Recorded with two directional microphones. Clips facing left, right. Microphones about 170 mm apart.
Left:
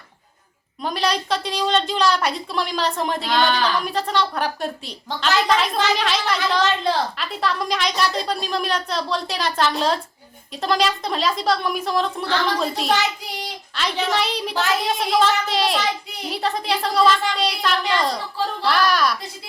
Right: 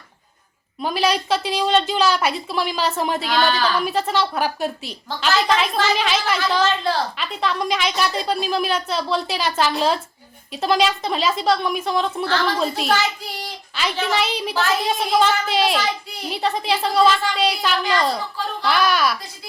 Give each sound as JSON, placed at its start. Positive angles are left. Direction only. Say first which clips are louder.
{"t": 0.8, "sound": "a woman's voice", "louder": "right 2 dB", "side_deg": -5}